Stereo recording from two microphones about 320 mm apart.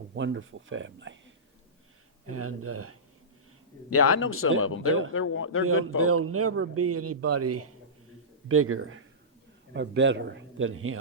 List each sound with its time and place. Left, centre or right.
0.2 s a man's voice: right
2.2 s a man's voice: right
3.8 s a man's voice: left
6.0 s a man's voice: right